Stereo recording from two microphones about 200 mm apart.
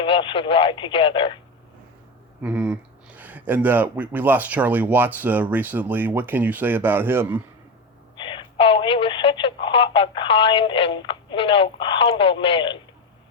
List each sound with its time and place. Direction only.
0.0 s speech: 25° left (ahead or behind)
2.4 s speech: 5° right (ahead or behind)
8.1 s speech: 25° left (ahead or behind)